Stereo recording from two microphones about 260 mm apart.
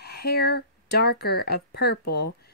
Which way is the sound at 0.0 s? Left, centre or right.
Left.